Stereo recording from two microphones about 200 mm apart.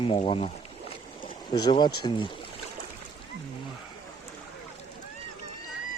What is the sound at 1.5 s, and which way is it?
Speech, 20° left (ahead or behind).